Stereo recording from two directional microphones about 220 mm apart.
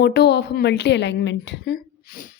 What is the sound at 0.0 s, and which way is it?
Speech, 50° left (ahead or behind).